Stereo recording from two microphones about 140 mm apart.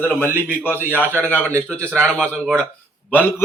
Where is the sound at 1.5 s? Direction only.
20° right (ahead or behind).